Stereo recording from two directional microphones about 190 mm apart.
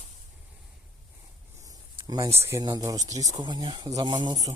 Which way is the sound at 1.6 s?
20° right (ahead or behind).